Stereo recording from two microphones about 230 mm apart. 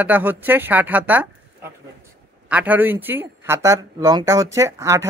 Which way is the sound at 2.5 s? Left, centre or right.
Centre.